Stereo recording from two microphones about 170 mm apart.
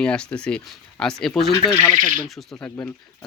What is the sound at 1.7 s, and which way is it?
Speech, 15° left (ahead or behind).